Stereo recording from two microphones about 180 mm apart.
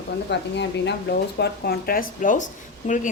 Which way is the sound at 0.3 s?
70° left (ahead or behind).